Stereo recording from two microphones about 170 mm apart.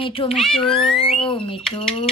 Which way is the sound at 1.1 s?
30° left (ahead or behind).